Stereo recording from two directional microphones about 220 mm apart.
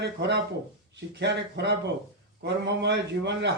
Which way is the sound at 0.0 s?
50° right (ahead or behind).